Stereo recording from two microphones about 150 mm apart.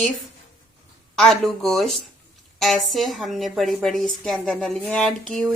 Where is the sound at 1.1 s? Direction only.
Centre (ahead or behind).